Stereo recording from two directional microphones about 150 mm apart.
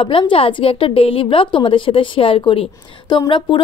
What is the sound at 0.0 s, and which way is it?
A woman's voice, 35° left (ahead or behind).